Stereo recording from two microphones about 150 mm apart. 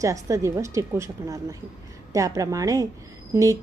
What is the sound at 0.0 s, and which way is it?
A woman's voice, 20° right (ahead or behind).